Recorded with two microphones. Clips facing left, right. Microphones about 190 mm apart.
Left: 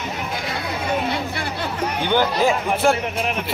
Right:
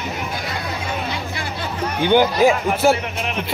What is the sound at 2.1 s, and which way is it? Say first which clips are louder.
Speech: right 5 dB; 15° right (ahead or behind).